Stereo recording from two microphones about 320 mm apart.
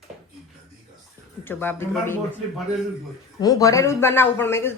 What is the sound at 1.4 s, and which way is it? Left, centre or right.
Speech, centre.